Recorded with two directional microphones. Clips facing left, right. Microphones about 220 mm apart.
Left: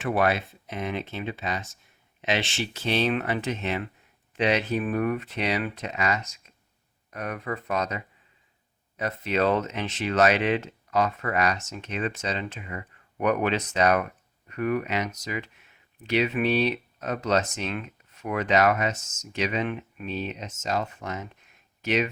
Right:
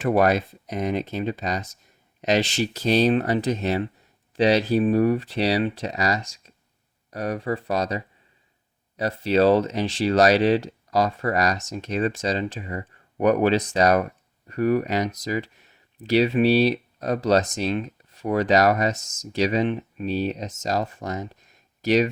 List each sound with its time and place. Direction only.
0.0 s speech: 40° right (ahead or behind)